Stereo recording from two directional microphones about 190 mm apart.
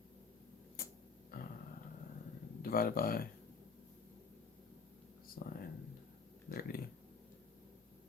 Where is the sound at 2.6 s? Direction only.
50° left (ahead or behind).